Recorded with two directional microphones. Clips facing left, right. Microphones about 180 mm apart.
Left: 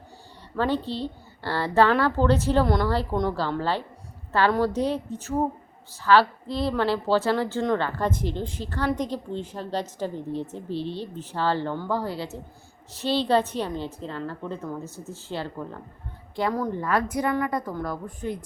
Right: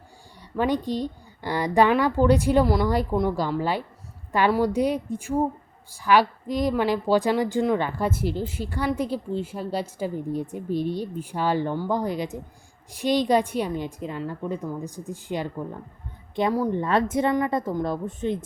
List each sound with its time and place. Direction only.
0.5 s a woman's voice: 15° right (ahead or behind)
16.8 s a woman's voice: 25° right (ahead or behind)